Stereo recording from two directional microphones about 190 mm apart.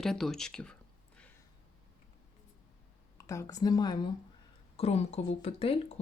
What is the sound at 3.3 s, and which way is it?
Speech, 15° left (ahead or behind).